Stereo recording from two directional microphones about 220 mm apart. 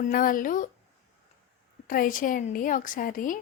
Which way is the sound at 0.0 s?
40° left (ahead or behind).